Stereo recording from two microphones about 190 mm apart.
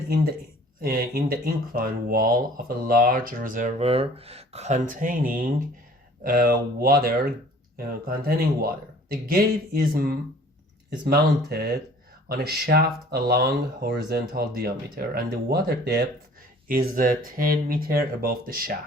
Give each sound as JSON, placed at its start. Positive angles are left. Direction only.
{"t": 0.8, "sound": "speech", "side_deg": -50}